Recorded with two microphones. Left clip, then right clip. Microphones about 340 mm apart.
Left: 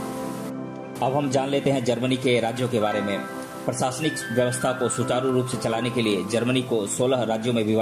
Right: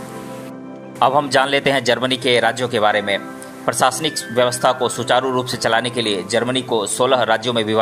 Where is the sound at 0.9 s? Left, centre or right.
Right.